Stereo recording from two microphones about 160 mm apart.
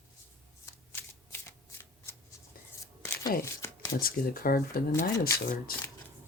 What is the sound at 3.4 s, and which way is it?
Shuffling cards, 15° left (ahead or behind).